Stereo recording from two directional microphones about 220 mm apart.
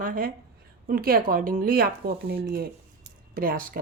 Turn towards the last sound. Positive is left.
turn(degrees=-40)  # may be behind; listen again after turning